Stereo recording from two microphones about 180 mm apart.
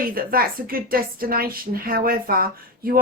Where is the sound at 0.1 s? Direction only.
55° right (ahead or behind).